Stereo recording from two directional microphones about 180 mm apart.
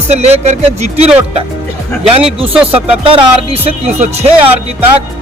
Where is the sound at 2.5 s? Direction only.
5° right (ahead or behind).